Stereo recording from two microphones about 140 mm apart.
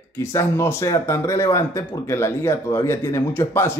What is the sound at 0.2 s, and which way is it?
Speech, 20° left (ahead or behind).